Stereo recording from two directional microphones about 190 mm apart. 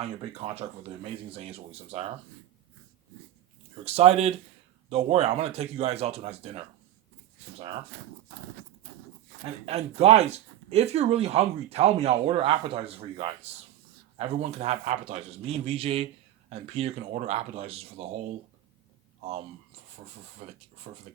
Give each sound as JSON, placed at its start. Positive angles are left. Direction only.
{"t": 0.0, "sound": "speech", "side_deg": -30}
{"t": 3.8, "sound": "speech", "side_deg": -35}
{"t": 9.4, "sound": "speech", "side_deg": -35}
{"t": 19.2, "sound": "speech", "side_deg": -35}